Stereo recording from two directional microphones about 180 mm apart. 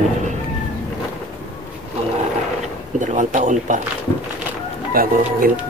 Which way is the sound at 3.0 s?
45° right (ahead or behind).